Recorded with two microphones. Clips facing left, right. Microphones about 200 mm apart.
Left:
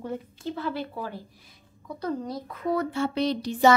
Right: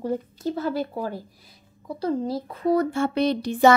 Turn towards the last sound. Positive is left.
turn(degrees=-55)  # may be behind; listen again after turning